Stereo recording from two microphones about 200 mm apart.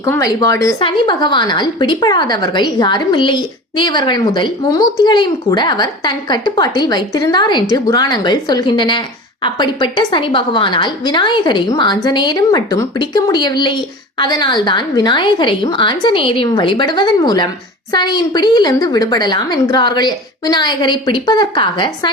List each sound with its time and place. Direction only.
0.0 s a woman's voice: 15° left (ahead or behind)